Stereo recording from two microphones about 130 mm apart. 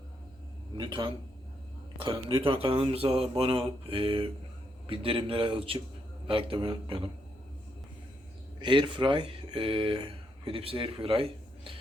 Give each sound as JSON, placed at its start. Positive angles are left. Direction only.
{"t": 0.8, "sound": "speech", "side_deg": -40}
{"t": 2.4, "sound": "speech", "side_deg": -45}
{"t": 8.6, "sound": "speech", "side_deg": -40}